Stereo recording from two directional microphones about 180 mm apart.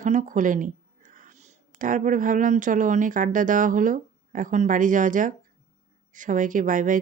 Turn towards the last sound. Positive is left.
turn(degrees=-45)  # may be behind; listen again after turning